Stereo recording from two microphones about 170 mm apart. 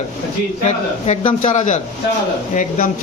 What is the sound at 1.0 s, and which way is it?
Speech, 35° left (ahead or behind).